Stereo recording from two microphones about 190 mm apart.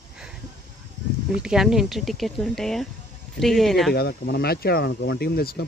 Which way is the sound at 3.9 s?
55° left (ahead or behind).